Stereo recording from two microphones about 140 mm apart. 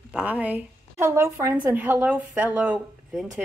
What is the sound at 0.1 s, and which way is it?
A woman's voice, 10° right (ahead or behind).